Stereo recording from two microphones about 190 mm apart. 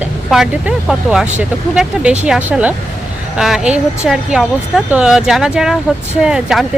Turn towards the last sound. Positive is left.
turn(degrees=-5)  # may be behind; listen again after turning